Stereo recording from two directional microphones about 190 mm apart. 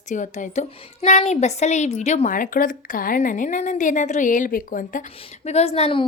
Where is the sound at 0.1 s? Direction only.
40° left (ahead or behind).